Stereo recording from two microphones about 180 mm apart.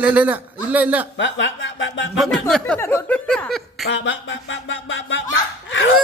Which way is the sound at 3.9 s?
90° left.